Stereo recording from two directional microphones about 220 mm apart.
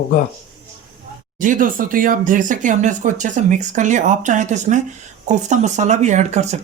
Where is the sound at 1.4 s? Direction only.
35° right (ahead or behind).